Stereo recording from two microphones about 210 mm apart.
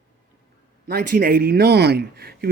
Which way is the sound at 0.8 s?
45° right (ahead or behind).